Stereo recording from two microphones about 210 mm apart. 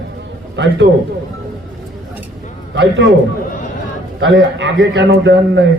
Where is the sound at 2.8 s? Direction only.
60° right (ahead or behind).